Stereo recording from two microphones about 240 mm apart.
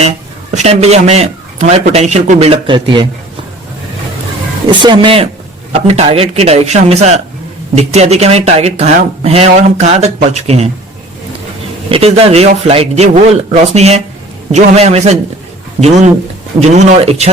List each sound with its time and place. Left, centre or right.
0.5 s speech: right
4.7 s speech: centre
11.9 s speech: right